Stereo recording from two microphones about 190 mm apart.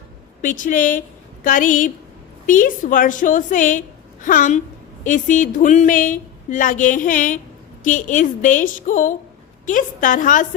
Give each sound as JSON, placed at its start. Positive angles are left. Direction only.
{"t": 0.4, "sound": "a woman's voice", "side_deg": 45}